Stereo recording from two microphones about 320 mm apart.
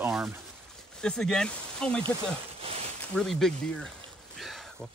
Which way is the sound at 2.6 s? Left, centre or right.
Centre.